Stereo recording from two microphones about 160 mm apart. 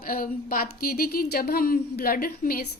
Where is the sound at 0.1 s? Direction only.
65° left (ahead or behind).